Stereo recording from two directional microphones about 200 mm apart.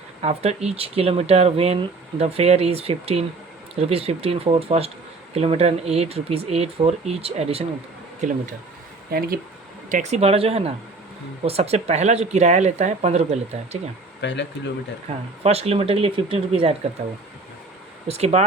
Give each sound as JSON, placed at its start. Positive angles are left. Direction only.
{"t": 0.2, "sound": "speech", "side_deg": -30}
{"t": 9.0, "sound": "speech", "side_deg": -50}
{"t": 9.9, "sound": "speech", "side_deg": -35}
{"t": 14.2, "sound": "speech", "side_deg": 60}
{"t": 15.1, "sound": "speech", "side_deg": -30}
{"t": 18.1, "sound": "speech", "side_deg": -30}